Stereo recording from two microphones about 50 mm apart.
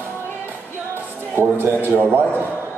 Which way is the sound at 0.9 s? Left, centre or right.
Right.